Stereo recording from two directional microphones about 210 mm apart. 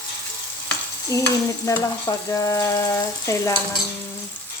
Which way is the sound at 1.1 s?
15° left (ahead or behind).